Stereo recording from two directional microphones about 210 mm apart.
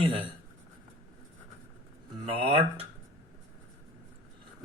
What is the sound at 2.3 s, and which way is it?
Speech, 25° right (ahead or behind).